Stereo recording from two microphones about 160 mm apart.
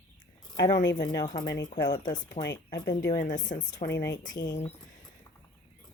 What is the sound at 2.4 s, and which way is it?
Speech, 90° left.